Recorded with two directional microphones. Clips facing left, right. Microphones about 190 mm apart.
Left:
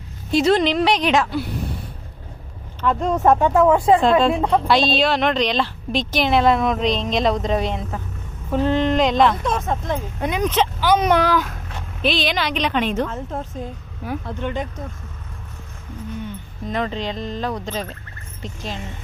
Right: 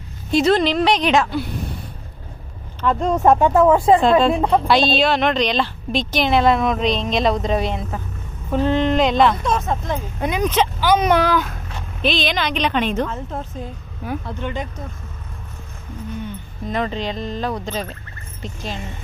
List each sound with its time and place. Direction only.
0.3 s speech: 5° left (ahead or behind)
2.8 s speech: 30° right (ahead or behind)
4.9 s speech: centre (ahead or behind)
9.4 s speech: 55° left (ahead or behind)
10.2 s speech: 10° right (ahead or behind); by 13.1 s 5° left (ahead or behind)
13.1 s a woman's voice: 45° left (ahead or behind)
16.6 s speech: 5° right (ahead or behind)